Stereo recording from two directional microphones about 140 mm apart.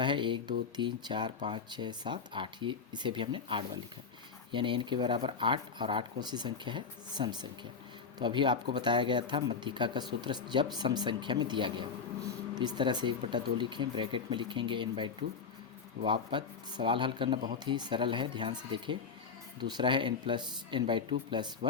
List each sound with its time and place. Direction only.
0.0 s speech: 35° right (ahead or behind)